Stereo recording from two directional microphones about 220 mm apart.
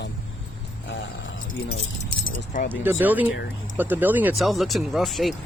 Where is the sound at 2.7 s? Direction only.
10° right (ahead or behind).